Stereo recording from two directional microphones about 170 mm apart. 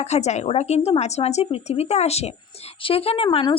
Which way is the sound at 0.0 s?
40° left (ahead or behind).